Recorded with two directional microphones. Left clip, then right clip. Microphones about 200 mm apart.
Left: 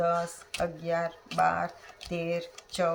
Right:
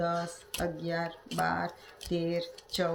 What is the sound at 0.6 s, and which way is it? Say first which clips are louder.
A woman's voice: left 4 dB; 50° left (ahead or behind).